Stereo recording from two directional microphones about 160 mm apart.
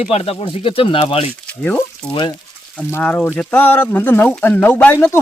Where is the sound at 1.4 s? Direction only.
10° left (ahead or behind).